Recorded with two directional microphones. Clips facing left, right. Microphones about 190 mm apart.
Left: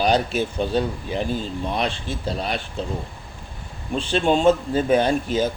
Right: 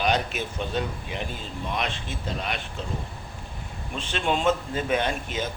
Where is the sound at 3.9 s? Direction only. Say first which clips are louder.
Left 7 dB; 35° left (ahead or behind).